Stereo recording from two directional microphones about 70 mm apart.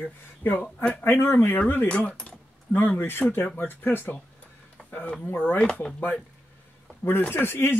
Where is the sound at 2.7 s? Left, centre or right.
Left.